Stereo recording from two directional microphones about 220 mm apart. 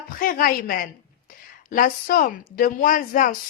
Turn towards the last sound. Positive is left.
turn(degrees=40)  # may be behind; listen again after turning